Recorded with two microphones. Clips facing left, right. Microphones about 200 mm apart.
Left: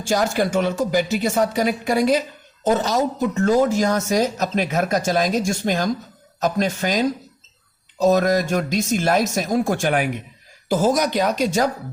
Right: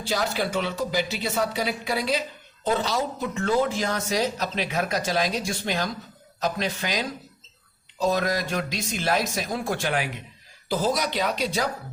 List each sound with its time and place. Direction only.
0.0 s speech: 45° left (ahead or behind)